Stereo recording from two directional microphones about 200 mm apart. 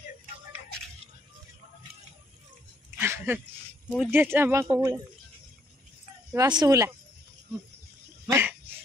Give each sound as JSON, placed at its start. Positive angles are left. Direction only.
{"t": 3.0, "sound": "a sound", "side_deg": -10}
{"t": 4.0, "sound": "speech", "side_deg": -10}
{"t": 6.3, "sound": "speech", "side_deg": -20}
{"t": 8.3, "sound": "dog", "side_deg": -10}